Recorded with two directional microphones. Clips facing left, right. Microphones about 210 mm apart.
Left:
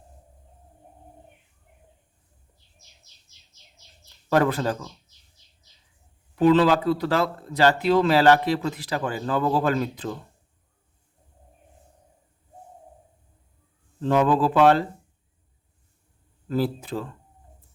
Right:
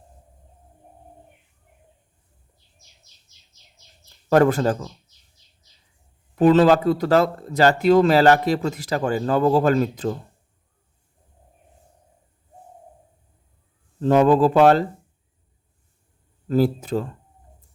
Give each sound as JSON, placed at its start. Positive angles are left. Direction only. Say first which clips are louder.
{"t": 4.3, "sound": "speech", "louder": "right 5 dB", "side_deg": -45}
{"t": 6.3, "sound": "speech", "louder": "right 3 dB", "side_deg": -45}
{"t": 14.0, "sound": "speech", "louder": "right 5 dB", "side_deg": -45}
{"t": 16.5, "sound": "speech", "louder": "right 6 dB", "side_deg": -45}